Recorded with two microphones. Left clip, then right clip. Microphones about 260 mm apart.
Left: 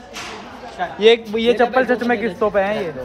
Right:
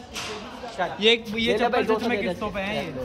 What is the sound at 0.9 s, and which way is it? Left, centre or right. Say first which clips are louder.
Speech: left 8 dB; centre.